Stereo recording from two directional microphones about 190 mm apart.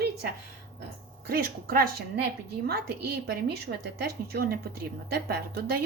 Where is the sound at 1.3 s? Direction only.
50° right (ahead or behind).